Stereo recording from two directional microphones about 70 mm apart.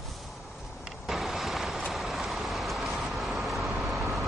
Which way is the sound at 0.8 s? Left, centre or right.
Centre.